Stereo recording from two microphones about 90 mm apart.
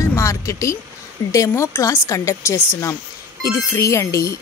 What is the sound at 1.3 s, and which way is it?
Speech, 35° left (ahead or behind).